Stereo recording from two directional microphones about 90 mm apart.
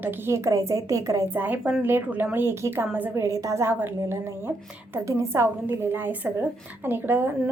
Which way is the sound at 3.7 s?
25° right (ahead or behind).